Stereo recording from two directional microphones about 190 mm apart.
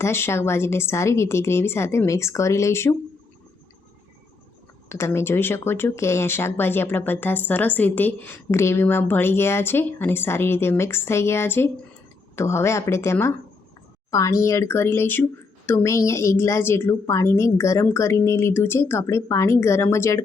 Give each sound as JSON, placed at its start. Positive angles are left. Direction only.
{"t": 0.0, "sound": "speech", "side_deg": 15}
{"t": 4.9, "sound": "speech", "side_deg": 15}